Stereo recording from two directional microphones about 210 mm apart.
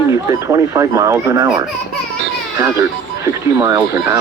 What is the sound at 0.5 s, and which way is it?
Speech, 15° right (ahead or behind).